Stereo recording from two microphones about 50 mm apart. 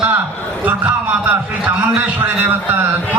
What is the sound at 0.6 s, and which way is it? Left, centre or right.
A man's voice, right.